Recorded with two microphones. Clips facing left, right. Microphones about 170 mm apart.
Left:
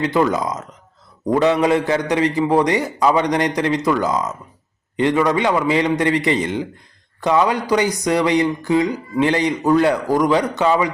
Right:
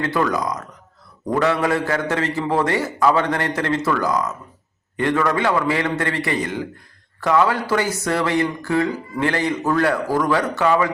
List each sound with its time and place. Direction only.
0.0 s a man's voice: 20° left (ahead or behind)